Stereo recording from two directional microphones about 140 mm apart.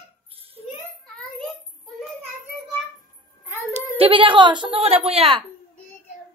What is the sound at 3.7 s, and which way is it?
Speech, 45° right (ahead or behind).